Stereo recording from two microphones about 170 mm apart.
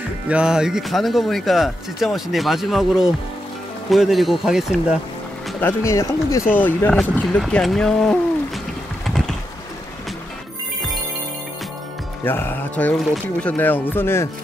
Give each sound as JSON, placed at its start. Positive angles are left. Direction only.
{"t": 0.3, "sound": "speech", "side_deg": -5}
{"t": 5.6, "sound": "speech", "side_deg": 15}
{"t": 9.0, "sound": "typing", "side_deg": 0}
{"t": 12.3, "sound": "speech", "side_deg": 10}